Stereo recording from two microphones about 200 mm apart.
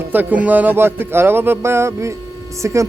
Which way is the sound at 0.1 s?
10° right (ahead or behind).